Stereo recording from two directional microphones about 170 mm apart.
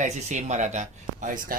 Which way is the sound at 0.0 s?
45° right (ahead or behind).